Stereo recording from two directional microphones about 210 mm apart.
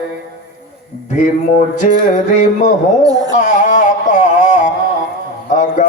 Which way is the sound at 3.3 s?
35° left (ahead or behind).